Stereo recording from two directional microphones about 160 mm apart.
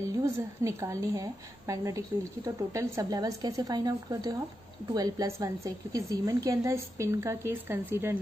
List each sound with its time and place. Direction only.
0.2 s a woman's voice: 20° right (ahead or behind)